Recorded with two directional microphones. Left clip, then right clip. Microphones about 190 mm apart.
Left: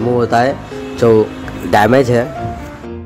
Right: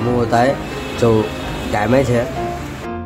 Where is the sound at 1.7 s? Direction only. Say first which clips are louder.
Left 6 dB; 40° left (ahead or behind).